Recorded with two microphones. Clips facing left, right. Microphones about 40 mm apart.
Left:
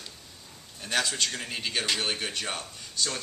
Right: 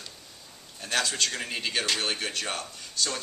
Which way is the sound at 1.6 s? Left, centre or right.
Centre.